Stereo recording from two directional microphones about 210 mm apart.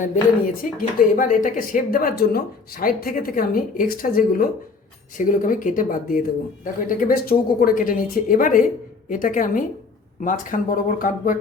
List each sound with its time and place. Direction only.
0.6 s speech: 45° left (ahead or behind)